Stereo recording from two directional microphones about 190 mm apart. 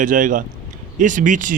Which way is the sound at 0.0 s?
45° right (ahead or behind).